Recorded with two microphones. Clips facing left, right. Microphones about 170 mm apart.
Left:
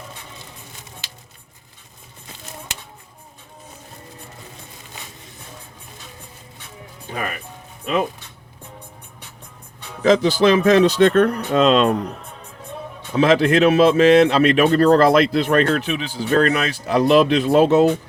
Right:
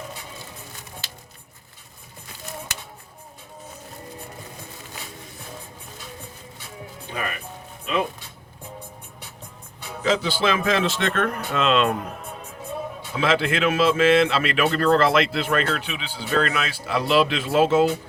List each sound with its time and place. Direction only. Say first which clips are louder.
10.0 s speech: left 8 dB; 45° left (ahead or behind)
13.1 s speech: left 7 dB; 40° left (ahead or behind)